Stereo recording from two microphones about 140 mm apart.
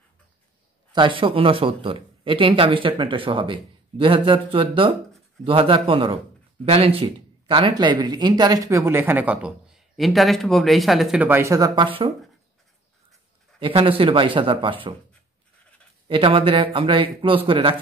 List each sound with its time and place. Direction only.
0.9 s speech: 35° right (ahead or behind); by 9.5 s 10° right (ahead or behind)
9.9 s speech: centre (ahead or behind)
11.2 s speech: 15° right (ahead or behind)
13.6 s speech: 40° right (ahead or behind)
16.1 s speech: 40° right (ahead or behind)